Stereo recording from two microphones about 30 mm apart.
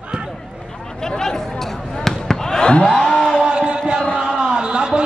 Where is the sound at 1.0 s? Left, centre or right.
Centre.